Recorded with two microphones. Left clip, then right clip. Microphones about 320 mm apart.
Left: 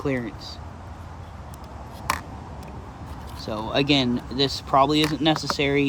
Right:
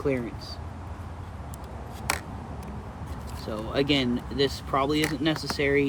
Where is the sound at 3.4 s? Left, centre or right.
Left.